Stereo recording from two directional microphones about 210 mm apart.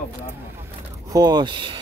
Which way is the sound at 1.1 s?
20° right (ahead or behind).